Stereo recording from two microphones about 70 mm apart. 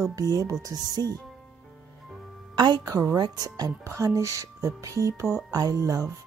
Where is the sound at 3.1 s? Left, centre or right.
Right.